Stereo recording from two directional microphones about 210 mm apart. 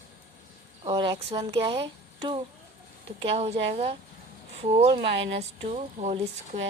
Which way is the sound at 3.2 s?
25° right (ahead or behind).